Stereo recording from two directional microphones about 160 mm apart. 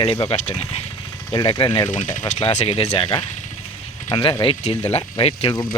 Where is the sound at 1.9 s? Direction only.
50° left (ahead or behind); by 3.1 s 35° left (ahead or behind).